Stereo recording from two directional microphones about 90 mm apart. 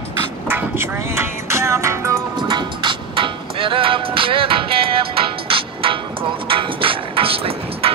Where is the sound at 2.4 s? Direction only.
65° right (ahead or behind).